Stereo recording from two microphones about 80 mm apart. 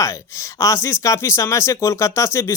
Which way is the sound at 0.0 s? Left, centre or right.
Left.